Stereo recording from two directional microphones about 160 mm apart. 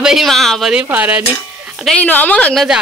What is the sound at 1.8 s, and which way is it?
Speech, 10° left (ahead or behind).